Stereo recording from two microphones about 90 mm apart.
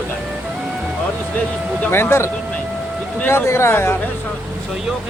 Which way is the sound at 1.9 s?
25° left (ahead or behind).